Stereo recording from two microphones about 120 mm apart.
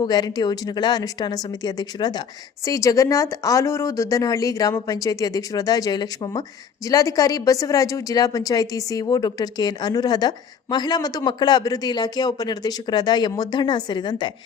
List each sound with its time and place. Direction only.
0.0 s a woman's voice: 35° left (ahead or behind)